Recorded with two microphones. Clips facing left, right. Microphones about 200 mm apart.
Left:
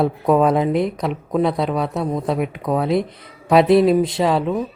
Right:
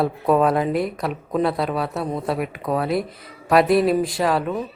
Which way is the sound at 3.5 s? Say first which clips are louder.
Left 3 dB; 25° left (ahead or behind).